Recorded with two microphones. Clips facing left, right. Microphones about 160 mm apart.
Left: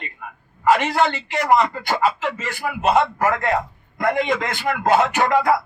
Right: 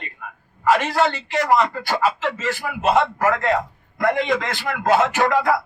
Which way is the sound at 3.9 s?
20° left (ahead or behind).